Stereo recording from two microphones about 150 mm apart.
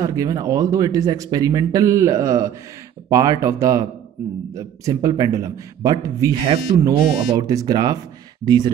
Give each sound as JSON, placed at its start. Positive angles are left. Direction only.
{"t": 0.0, "sound": "speech", "side_deg": -25}